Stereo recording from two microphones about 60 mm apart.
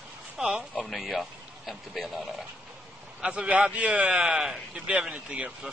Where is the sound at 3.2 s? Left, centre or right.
Centre.